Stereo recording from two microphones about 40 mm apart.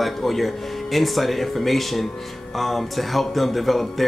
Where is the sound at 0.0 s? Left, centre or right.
Centre.